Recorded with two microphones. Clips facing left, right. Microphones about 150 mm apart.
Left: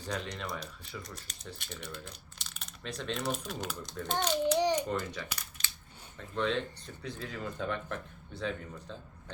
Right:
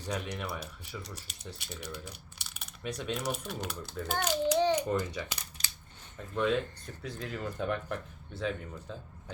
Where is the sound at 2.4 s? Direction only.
10° right (ahead or behind).